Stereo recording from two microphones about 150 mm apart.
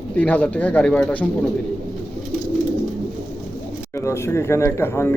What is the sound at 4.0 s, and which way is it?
Speech, 20° left (ahead or behind).